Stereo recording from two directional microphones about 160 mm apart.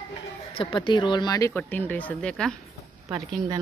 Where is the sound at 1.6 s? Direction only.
10° left (ahead or behind).